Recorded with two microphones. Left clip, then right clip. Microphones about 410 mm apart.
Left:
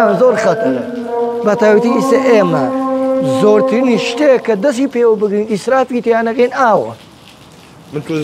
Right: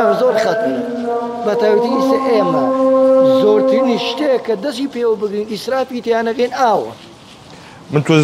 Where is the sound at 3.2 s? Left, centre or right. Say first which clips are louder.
Even; left.